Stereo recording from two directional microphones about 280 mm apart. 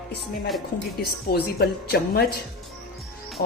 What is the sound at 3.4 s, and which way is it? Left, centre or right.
Speech, left.